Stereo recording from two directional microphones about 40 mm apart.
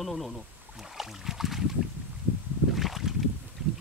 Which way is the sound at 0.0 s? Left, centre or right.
Centre.